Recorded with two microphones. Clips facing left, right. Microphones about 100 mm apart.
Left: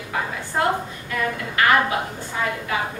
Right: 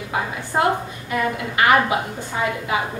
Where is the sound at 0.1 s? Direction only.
20° right (ahead or behind).